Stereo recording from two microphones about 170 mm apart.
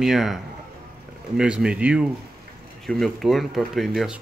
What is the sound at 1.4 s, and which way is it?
Speech, 5° right (ahead or behind).